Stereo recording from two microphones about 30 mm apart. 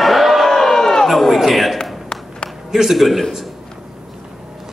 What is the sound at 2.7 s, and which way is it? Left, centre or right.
Speech, centre.